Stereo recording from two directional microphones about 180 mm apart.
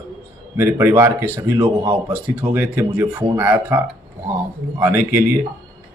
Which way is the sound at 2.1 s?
10° right (ahead or behind).